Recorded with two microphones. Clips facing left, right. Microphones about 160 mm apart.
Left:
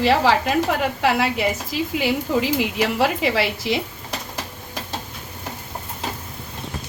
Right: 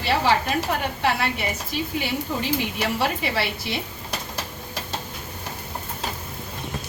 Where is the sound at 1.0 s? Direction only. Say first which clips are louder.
Left 5 dB; 90° left.